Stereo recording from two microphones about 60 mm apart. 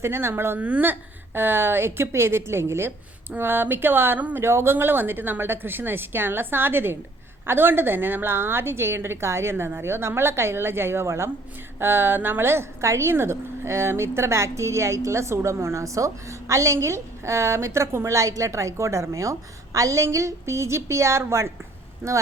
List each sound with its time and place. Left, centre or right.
0.0 s a woman's voice: right
0.6 s a woman's voice: right
11.8 s a woman's voice: right